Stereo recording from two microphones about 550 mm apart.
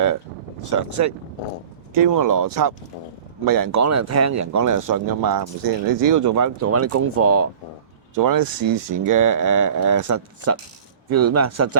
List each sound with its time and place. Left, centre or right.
0.6 s speech: right
8.1 s speech: right